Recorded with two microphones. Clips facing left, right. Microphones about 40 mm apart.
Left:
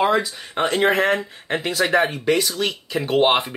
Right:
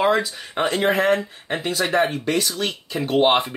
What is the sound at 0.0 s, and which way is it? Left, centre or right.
Speech, centre.